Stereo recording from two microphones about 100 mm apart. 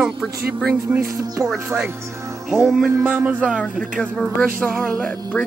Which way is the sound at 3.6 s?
5° left (ahead or behind).